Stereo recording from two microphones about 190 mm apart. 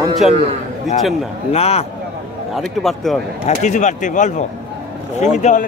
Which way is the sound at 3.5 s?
40° left (ahead or behind).